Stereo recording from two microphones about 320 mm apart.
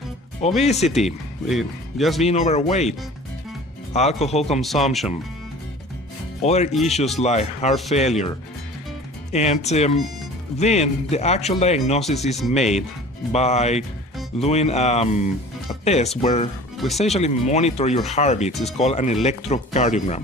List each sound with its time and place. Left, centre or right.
0.6 s speech: centre
1.0 s speech: centre
2.2 s speech: left
3.9 s speech: centre
4.6 s speech: centre
6.4 s speech: centre
9.3 s speech: left